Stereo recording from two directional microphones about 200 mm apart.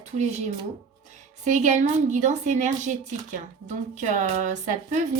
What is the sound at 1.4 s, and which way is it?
A woman's voice, 35° right (ahead or behind).